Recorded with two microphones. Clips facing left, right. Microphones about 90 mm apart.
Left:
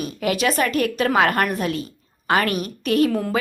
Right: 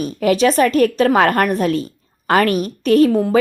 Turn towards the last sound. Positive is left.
turn(degrees=-35)  # may be behind; listen again after turning